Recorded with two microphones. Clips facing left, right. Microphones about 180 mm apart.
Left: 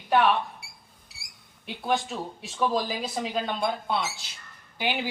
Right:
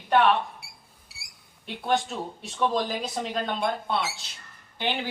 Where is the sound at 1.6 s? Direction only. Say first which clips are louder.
Right 1 dB; centre (ahead or behind).